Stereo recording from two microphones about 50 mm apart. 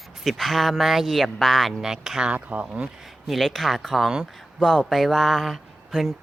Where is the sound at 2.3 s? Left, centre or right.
Right.